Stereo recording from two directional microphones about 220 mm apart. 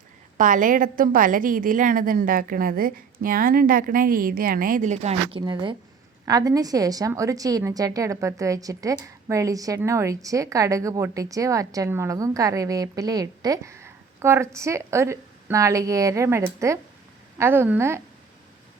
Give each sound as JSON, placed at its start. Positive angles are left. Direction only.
{"t": 0.3, "sound": "a woman's voice", "side_deg": -35}
{"t": 5.4, "sound": "a woman's voice", "side_deg": -20}